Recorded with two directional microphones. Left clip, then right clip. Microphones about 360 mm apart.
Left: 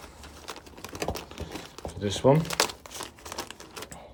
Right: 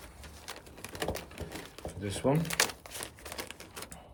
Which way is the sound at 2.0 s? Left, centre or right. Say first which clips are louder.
Left 8 dB; centre.